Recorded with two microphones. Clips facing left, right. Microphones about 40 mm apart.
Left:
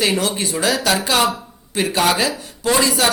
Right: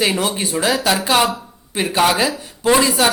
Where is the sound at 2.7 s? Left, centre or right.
Centre.